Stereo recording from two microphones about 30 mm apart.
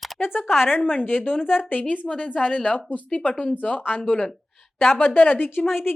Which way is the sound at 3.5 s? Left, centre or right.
Left.